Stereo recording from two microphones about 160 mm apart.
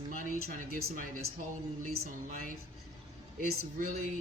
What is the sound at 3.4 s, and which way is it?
Speech, 65° right (ahead or behind).